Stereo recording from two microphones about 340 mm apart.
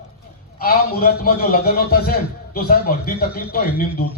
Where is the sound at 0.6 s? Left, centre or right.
Left.